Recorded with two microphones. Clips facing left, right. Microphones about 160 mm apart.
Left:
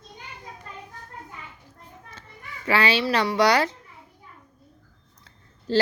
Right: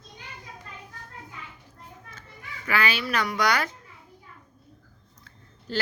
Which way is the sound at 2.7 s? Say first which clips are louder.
Left 5 dB; 30° left (ahead or behind).